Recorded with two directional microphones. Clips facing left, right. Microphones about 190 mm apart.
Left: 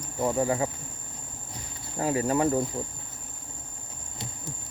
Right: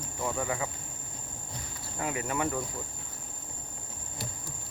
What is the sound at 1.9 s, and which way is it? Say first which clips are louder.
Cricket: left 7 dB; 35° left (ahead or behind).